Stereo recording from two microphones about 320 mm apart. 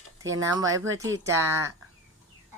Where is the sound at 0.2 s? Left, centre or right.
Centre.